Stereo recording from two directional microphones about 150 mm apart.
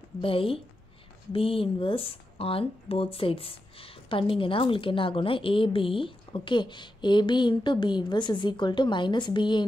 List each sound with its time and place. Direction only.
0.2 s speech: 35° left (ahead or behind)